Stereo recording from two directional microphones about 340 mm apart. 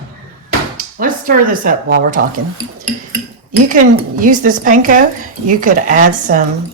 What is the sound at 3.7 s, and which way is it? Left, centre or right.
Speech, right.